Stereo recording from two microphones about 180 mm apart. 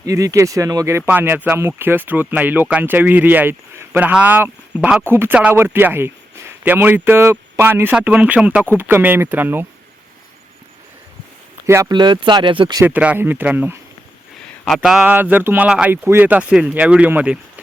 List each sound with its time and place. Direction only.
0.0 s speech: 20° right (ahead or behind)
11.6 s speech: 15° right (ahead or behind)
12.8 s speech: 10° right (ahead or behind)
14.8 s speech: 5° right (ahead or behind)